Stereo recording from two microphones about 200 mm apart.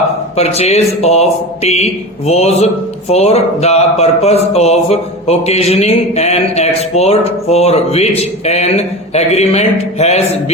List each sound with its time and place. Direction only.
0.3 s speech: 30° left (ahead or behind)